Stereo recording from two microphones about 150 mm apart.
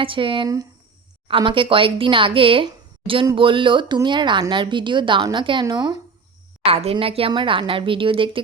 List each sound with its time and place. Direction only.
0.0 s speech: 35° right (ahead or behind)
6.7 s speech: 40° right (ahead or behind)